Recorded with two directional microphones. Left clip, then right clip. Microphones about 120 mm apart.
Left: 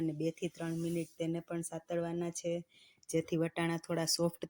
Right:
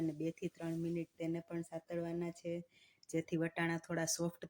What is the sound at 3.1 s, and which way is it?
Speech, 50° left (ahead or behind).